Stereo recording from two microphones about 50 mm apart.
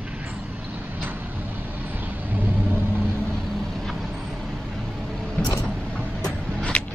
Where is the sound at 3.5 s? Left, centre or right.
Centre.